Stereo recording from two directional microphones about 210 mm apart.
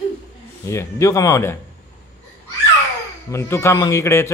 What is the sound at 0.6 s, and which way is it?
Speech, 15° left (ahead or behind).